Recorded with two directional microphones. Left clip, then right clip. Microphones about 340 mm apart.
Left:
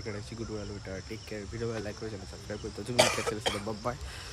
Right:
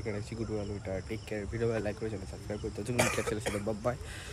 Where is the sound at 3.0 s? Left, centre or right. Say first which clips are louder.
Left 5 dB; centre.